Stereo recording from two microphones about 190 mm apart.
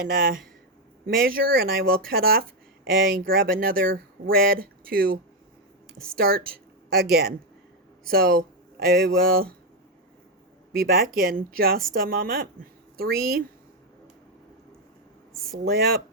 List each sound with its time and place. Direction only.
0.1 s speech: 50° right (ahead or behind)
5.9 s a woman's voice: 5° left (ahead or behind)
6.1 s speech: 55° right (ahead or behind)
10.7 s speech: 50° right (ahead or behind)
15.5 s speech: 55° right (ahead or behind)